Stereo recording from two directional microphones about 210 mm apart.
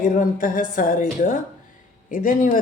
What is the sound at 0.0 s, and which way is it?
Speech, 40° left (ahead or behind).